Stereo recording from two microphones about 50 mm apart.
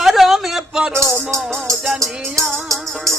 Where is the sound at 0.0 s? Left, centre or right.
Centre.